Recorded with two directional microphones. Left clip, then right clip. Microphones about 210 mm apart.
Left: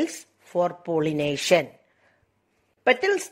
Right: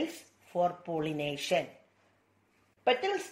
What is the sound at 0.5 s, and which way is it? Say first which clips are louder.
Speech: left 6 dB; 45° left (ahead or behind).